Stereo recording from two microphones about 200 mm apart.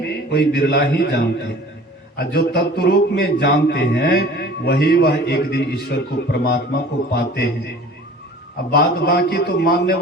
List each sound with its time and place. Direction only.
0.0 s a man's voice: 55° left (ahead or behind)
8.7 s a man's voice: 55° left (ahead or behind)